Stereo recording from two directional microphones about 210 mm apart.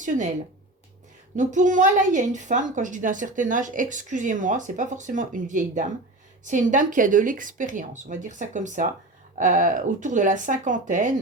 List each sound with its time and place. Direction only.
0.0 s speech: 35° right (ahead or behind)
1.4 s a woman's voice: 35° right (ahead or behind)